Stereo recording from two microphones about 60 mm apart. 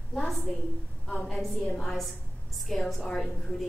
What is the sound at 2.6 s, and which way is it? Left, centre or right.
A woman's voice, centre.